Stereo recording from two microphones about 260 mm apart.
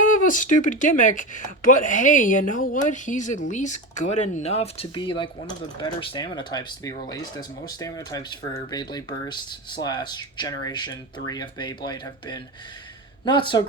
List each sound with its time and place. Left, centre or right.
0.0 s speech: left